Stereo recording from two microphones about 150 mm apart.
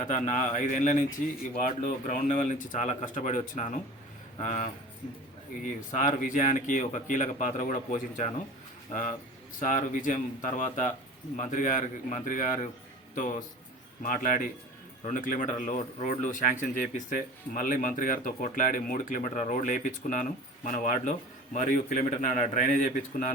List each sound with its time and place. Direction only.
0.0 s speech: 55° left (ahead or behind)
5.9 s speech: 60° left (ahead or behind)
14.0 s speech: 65° left (ahead or behind)